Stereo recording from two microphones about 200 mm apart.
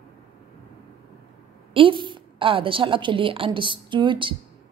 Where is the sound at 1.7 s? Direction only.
25° right (ahead or behind).